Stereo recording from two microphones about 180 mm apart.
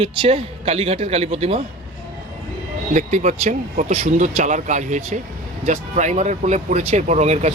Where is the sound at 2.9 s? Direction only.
40° right (ahead or behind).